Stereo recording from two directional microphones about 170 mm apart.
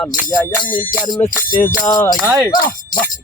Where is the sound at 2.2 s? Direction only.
10° right (ahead or behind).